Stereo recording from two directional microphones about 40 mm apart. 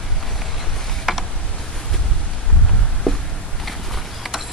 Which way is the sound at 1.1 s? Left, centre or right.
Centre.